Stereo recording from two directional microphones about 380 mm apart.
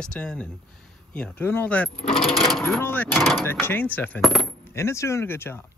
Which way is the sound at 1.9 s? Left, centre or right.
Centre.